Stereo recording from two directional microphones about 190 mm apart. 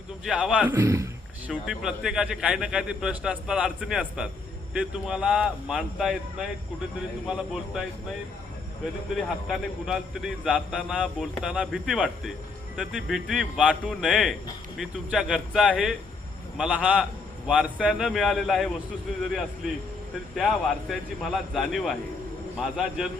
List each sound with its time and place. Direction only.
0.3 s speech: 5° right (ahead or behind)
1.5 s a man's voice: 5° right (ahead or behind)
7.3 s a man's voice: centre (ahead or behind)
9.1 s a man's voice: centre (ahead or behind)
20.3 s a man's voice: centre (ahead or behind)